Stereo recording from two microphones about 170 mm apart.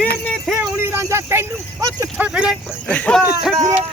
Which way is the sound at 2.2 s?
5° right (ahead or behind).